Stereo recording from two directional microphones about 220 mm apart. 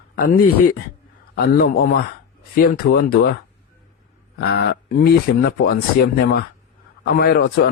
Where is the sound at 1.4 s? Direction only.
40° left (ahead or behind).